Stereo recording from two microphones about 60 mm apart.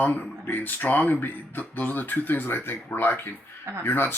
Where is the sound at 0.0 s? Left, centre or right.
Left.